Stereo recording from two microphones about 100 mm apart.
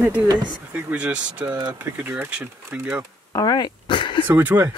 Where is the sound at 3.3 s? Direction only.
40° left (ahead or behind).